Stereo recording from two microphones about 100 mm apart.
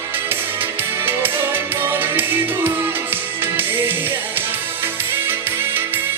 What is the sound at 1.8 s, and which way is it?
Music, 20° right (ahead or behind).